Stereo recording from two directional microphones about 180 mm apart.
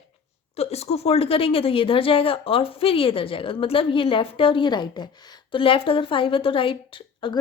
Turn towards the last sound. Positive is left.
turn(degrees=30)  # may be behind; listen again after turning